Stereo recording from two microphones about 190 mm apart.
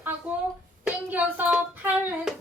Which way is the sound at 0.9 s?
10° right (ahead or behind).